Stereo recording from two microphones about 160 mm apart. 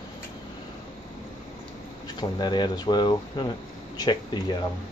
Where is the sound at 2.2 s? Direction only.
25° left (ahead or behind).